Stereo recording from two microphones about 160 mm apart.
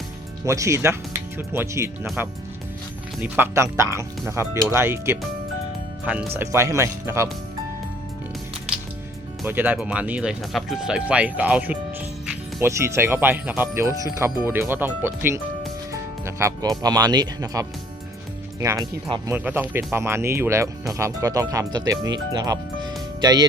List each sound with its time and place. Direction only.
0.4 s speech: 20° right (ahead or behind)
6.3 s speech: 15° right (ahead or behind)
9.5 s speech: 10° right (ahead or behind)